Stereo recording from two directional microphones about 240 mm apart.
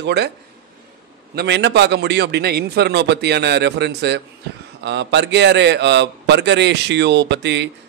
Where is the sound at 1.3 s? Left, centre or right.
Right.